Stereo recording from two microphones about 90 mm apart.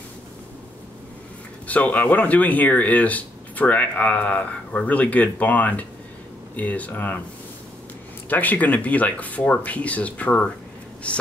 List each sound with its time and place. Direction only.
1.7 s speech: 15° left (ahead or behind)
8.3 s speech: 20° left (ahead or behind)